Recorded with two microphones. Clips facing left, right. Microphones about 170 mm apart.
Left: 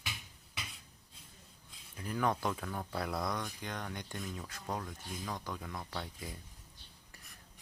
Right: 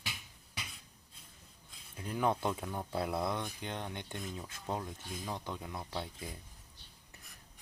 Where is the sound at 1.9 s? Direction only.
20° right (ahead or behind).